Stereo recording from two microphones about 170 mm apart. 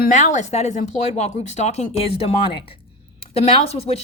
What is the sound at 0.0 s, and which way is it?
Speech, 45° left (ahead or behind).